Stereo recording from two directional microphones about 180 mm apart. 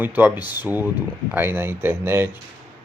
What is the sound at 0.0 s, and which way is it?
Speech, 10° right (ahead or behind).